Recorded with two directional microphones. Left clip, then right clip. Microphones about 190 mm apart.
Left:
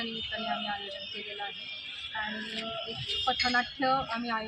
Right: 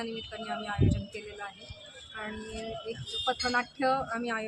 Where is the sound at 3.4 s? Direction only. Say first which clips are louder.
Right 2 dB; 30° right (ahead or behind).